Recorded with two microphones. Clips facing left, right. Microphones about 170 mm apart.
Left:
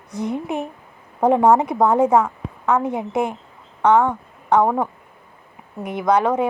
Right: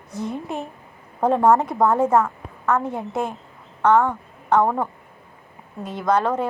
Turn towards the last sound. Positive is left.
turn(degrees=15)  # may be behind; listen again after turning